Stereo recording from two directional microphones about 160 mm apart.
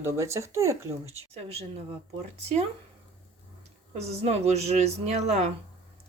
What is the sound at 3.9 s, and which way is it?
Speech, 40° right (ahead or behind).